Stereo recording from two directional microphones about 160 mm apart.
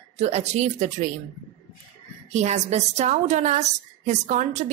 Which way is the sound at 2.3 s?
45° right (ahead or behind).